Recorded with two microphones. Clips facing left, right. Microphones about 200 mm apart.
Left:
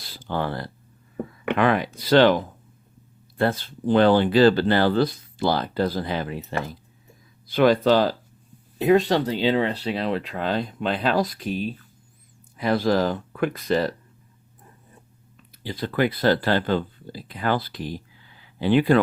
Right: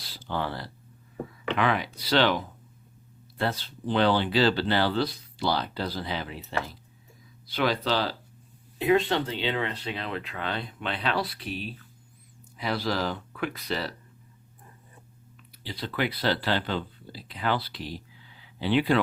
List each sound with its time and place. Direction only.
0.1 s speech: 50° left (ahead or behind)
15.6 s speech: 45° left (ahead or behind)